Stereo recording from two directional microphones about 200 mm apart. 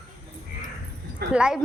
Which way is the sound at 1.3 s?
5° right (ahead or behind).